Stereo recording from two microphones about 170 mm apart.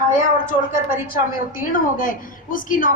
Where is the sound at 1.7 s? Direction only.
55° left (ahead or behind).